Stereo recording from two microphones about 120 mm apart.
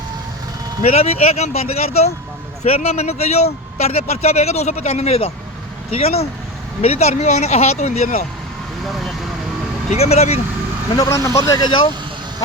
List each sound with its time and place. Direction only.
0.8 s speech: 60° left (ahead or behind)
8.8 s speech: centre (ahead or behind)
9.9 s speech: 65° left (ahead or behind)
10.9 s speech: 30° left (ahead or behind)